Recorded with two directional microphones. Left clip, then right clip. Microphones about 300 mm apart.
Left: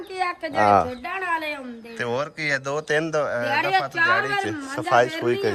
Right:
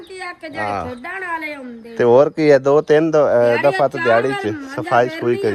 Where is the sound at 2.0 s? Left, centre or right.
Centre.